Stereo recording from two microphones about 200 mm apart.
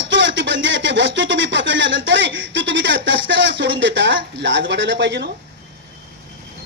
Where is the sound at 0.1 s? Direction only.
65° right (ahead or behind).